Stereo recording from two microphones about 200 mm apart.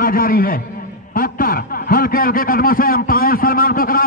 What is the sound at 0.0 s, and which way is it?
Speech, 45° left (ahead or behind).